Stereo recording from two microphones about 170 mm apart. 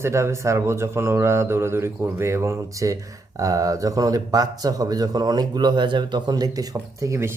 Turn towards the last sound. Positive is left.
turn(degrees=-15)  # may be behind; listen again after turning